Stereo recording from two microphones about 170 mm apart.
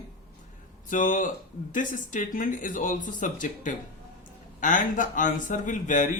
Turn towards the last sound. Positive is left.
turn(degrees=50)  # may be behind; listen again after turning